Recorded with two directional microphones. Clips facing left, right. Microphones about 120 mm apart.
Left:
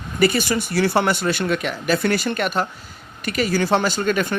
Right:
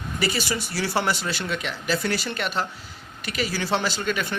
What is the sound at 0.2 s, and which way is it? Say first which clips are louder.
Speech: left 8 dB; 50° left (ahead or behind).